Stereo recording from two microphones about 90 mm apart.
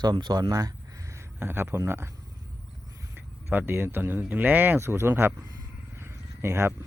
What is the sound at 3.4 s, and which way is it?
Speech, 25° right (ahead or behind).